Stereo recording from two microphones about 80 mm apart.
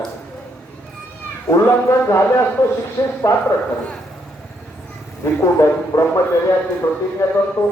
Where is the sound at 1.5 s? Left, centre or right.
Left.